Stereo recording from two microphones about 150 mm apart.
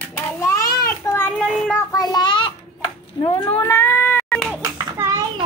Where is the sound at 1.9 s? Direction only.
30° left (ahead or behind).